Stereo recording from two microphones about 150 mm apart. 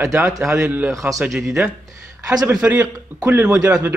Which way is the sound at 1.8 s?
20° right (ahead or behind).